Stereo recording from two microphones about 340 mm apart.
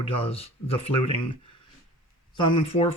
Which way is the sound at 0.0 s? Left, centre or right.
Centre.